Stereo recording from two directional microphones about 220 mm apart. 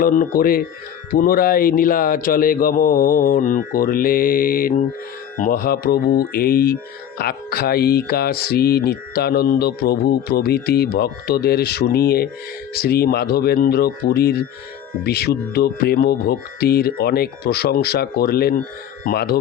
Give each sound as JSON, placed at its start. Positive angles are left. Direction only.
{"t": 0.0, "sound": "speech", "side_deg": 40}